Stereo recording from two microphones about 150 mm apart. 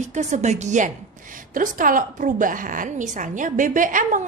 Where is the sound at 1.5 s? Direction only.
65° right (ahead or behind).